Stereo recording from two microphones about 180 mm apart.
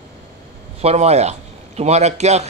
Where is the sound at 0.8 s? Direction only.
35° right (ahead or behind).